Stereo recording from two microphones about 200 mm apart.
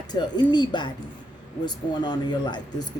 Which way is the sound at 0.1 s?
20° left (ahead or behind).